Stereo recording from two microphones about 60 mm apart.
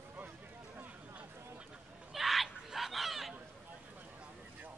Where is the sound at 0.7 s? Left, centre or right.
Right.